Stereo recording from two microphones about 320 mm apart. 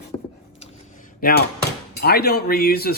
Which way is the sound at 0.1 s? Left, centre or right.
Centre.